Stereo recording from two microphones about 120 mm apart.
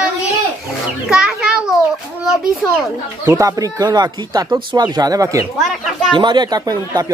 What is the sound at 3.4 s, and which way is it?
Speech, 30° right (ahead or behind).